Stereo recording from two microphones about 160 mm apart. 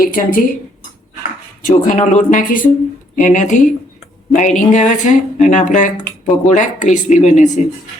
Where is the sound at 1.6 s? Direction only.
50° left (ahead or behind).